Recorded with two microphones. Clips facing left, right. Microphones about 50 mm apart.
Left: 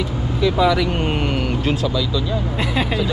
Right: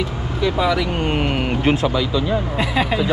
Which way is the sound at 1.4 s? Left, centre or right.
Right.